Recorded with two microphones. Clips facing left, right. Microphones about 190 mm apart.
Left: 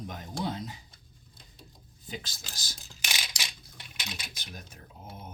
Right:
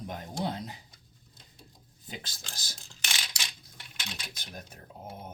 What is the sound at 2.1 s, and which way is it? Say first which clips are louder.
Speech: left 2 dB; 55° right (ahead or behind).